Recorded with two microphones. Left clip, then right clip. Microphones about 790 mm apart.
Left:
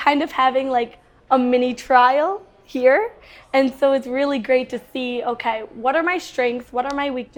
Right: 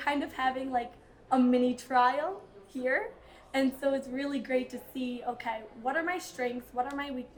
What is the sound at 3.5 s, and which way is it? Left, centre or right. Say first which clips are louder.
A woman's voice: left 13 dB; left.